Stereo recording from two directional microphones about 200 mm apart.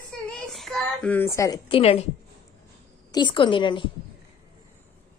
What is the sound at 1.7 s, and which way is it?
Speech, 30° left (ahead or behind).